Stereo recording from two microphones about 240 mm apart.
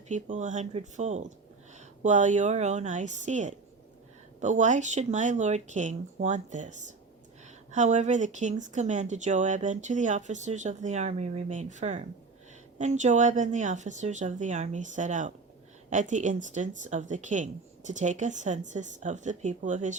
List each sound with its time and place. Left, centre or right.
0.1 s speech: right